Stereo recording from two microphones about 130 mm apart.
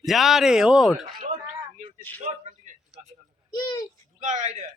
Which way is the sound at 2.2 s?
65° right (ahead or behind).